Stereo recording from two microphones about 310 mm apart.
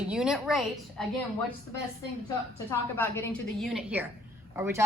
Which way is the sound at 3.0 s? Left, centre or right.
Centre.